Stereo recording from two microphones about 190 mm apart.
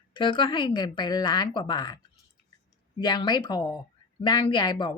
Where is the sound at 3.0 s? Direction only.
20° left (ahead or behind).